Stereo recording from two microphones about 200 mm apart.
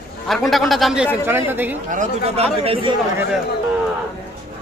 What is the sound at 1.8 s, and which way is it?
Speech, 40° right (ahead or behind).